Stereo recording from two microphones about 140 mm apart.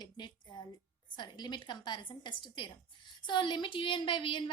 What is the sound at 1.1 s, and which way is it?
A woman's voice, 35° left (ahead or behind).